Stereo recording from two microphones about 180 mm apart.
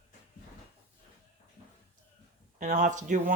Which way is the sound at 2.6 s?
45° right (ahead or behind).